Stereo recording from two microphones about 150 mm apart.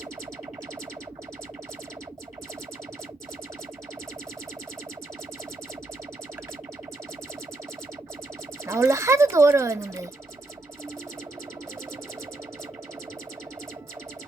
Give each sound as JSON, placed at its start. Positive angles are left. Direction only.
{"t": 8.6, "sound": "speech", "side_deg": -20}